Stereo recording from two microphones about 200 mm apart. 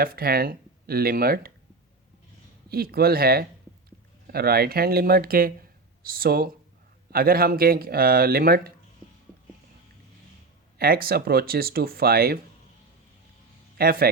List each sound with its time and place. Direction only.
0.0 s speech: 50° right (ahead or behind)
2.6 s speech: 50° right (ahead or behind)
10.8 s speech: 50° right (ahead or behind)
13.7 s speech: 50° right (ahead or behind)